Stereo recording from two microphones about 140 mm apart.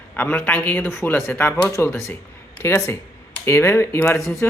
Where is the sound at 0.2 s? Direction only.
10° left (ahead or behind).